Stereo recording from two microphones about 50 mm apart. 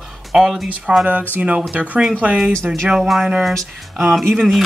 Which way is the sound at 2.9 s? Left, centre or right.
Centre.